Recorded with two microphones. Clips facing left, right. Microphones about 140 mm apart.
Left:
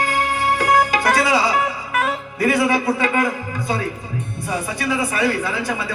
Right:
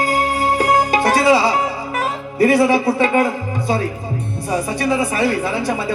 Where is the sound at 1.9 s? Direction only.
30° right (ahead or behind).